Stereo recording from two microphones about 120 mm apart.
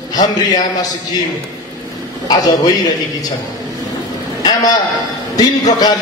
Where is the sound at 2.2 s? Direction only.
35° left (ahead or behind).